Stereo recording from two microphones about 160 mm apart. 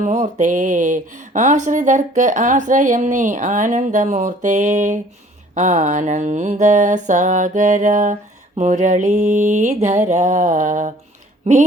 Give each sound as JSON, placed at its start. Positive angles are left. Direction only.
{"t": 0.0, "sound": "mantra", "side_deg": -50}